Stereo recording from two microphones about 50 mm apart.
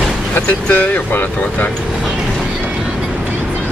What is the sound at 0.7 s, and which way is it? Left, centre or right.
Speech, left.